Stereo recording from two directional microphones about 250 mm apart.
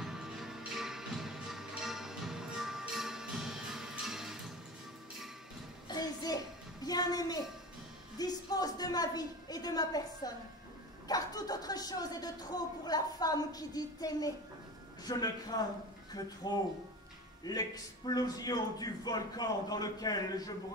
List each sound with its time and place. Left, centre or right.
0.0 s music: centre
5.9 s a sound: centre
11.1 s speech: centre
17.5 s speech: centre